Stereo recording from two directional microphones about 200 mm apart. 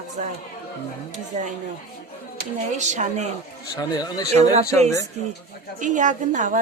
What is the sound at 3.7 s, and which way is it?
Speech, 20° left (ahead or behind).